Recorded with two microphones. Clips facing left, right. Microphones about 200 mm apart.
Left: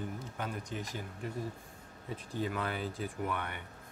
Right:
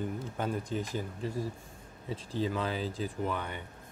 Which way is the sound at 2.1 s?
90° right.